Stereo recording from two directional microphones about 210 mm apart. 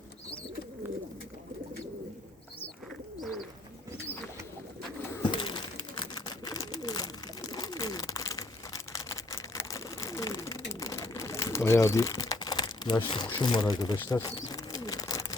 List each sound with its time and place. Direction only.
3.2 s bird: centre (ahead or behind)
5.1 s pigeon: 20° left (ahead or behind)
13.1 s speech: 20° left (ahead or behind)